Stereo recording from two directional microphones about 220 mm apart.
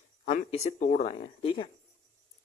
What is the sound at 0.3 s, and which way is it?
Speech, 30° left (ahead or behind).